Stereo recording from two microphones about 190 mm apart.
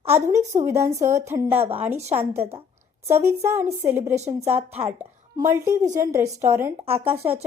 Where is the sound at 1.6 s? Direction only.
30° right (ahead or behind).